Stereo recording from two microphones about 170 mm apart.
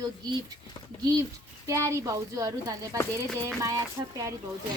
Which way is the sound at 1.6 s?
15° right (ahead or behind).